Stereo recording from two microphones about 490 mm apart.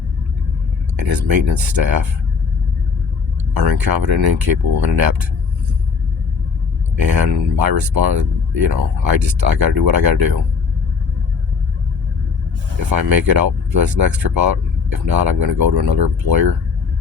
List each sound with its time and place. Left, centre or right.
0.9 s speech: right
3.5 s speech: right
7.0 s speech: right
12.9 s speech: right